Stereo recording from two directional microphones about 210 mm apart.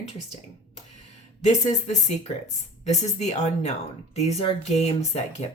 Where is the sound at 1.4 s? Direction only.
35° left (ahead or behind).